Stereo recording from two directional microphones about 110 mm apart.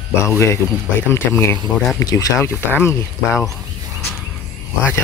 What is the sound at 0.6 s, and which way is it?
Speech, 20° right (ahead or behind).